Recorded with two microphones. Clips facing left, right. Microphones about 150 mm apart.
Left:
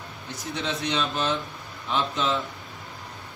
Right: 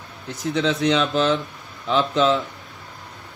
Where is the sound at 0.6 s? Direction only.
90° right.